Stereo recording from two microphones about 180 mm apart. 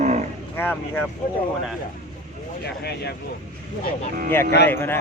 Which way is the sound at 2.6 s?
65° left (ahead or behind).